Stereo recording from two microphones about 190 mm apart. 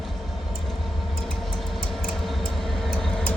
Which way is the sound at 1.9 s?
Centre (ahead or behind).